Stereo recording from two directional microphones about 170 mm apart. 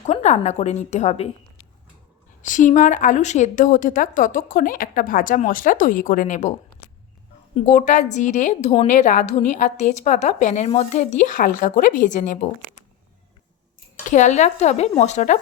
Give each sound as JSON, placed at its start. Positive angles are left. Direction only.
{"t": 0.0, "sound": "a woman's voice", "side_deg": 40}
{"t": 2.4, "sound": "a woman's voice", "side_deg": 50}
{"t": 7.5, "sound": "a woman's voice", "side_deg": 45}
{"t": 14.1, "sound": "a woman's voice", "side_deg": 45}